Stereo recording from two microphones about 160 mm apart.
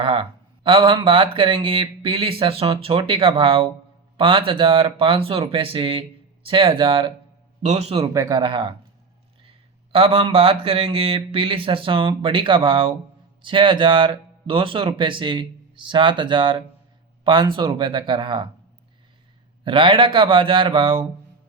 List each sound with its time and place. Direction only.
0.0 s speech: 35° right (ahead or behind)
7.6 s speech: 45° right (ahead or behind)
8.1 s speech: 20° right (ahead or behind)
19.6 s speech: 30° right (ahead or behind)